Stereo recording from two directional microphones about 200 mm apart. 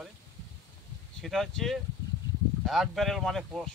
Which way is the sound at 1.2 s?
Centre (ahead or behind).